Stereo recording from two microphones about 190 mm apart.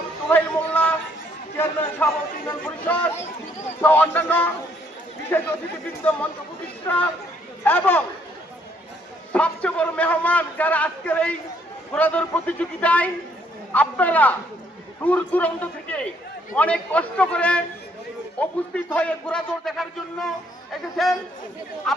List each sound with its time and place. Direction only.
0.3 s a man's voice: 10° left (ahead or behind)
6.8 s a man's voice: 10° left (ahead or behind)
9.3 s a man's voice: 5° left (ahead or behind)